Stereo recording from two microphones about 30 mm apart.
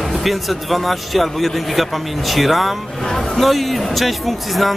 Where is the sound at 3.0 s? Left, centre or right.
Centre.